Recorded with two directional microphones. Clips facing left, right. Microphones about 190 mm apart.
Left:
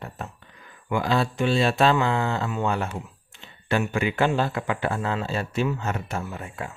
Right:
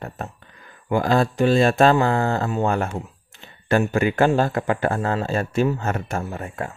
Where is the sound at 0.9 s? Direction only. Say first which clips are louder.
Right 5 dB; 45° right (ahead or behind).